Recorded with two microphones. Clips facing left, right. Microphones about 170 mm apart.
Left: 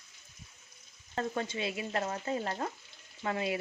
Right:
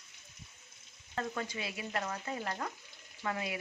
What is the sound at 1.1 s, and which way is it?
Stir, 30° left (ahead or behind).